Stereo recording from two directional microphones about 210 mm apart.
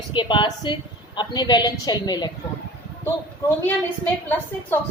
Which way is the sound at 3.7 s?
10° left (ahead or behind).